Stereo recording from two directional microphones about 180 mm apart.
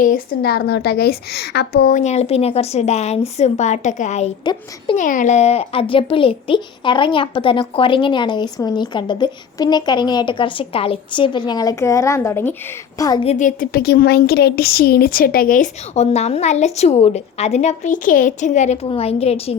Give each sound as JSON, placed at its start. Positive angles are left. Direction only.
{"t": 0.0, "sound": "a woman's voice", "side_deg": 55}
{"t": 13.2, "sound": "speech", "side_deg": 45}